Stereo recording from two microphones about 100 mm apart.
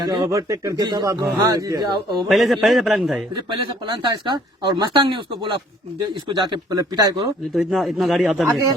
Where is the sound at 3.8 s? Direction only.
50° right (ahead or behind).